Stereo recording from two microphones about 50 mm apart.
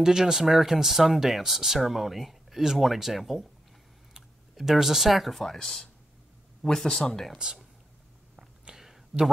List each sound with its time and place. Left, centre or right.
0.0 s speech: centre
4.6 s speech: centre
8.4 s a sound: centre